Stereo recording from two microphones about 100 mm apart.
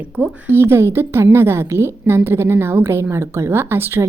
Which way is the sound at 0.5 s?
25° right (ahead or behind).